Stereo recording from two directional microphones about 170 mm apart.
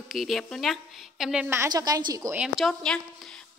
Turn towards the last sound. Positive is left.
turn(degrees=5)  # may be behind; listen again after turning